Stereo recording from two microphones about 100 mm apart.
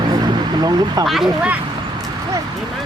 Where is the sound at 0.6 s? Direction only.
40° right (ahead or behind).